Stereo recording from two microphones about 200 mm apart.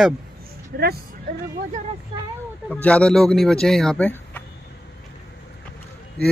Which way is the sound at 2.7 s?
5° left (ahead or behind).